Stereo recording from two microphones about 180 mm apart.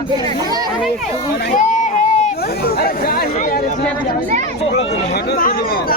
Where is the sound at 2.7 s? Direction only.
60° left (ahead or behind).